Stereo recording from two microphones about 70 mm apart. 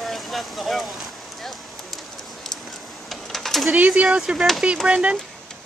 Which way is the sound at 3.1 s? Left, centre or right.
Centre.